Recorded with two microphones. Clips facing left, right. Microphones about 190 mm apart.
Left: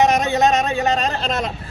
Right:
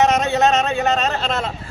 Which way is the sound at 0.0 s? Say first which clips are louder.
Even; 15° left (ahead or behind).